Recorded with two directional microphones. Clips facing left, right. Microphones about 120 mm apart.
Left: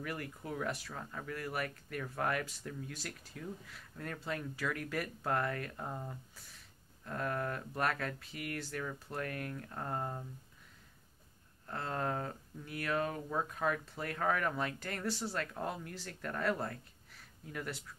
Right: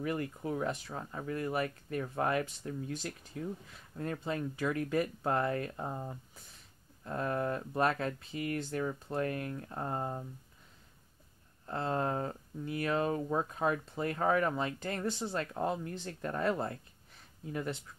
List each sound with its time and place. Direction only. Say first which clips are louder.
0.0 s speech: right 7 dB; 25° right (ahead or behind)
11.6 s speech: right 4 dB; 25° right (ahead or behind)